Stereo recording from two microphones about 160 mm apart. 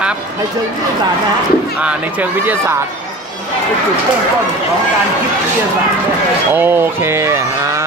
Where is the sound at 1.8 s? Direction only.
10° right (ahead or behind).